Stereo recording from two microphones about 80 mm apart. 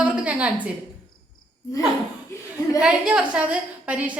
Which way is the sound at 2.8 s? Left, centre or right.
Centre.